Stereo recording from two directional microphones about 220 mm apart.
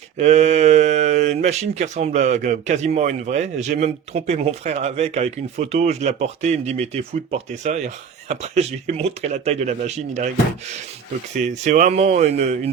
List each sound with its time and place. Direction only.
0.2 s speech: 30° right (ahead or behind)
11.3 s speech: 35° right (ahead or behind)